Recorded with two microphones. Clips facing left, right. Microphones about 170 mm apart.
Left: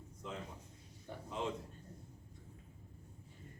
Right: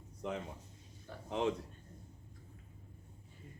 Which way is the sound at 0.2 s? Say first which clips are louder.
Right 7 dB; 65° right (ahead or behind).